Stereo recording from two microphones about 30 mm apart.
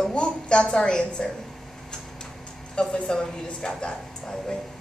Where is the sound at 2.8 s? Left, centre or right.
Left.